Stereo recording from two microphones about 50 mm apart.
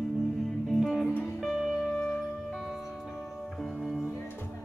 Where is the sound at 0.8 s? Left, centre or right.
Centre.